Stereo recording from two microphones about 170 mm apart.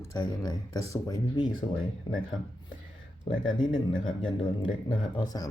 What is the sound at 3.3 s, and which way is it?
Speech, 35° left (ahead or behind).